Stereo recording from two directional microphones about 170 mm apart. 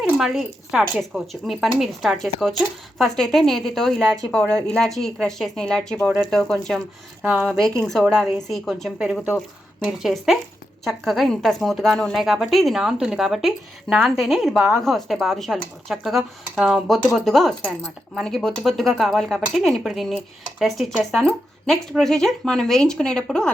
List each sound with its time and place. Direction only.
0.0 s a woman's voice: centre (ahead or behind)
7.3 s speech: 10° right (ahead or behind)
7.6 s a woman's voice: centre (ahead or behind)